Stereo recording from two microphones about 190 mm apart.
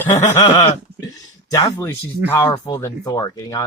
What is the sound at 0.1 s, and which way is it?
Speech, 20° left (ahead or behind).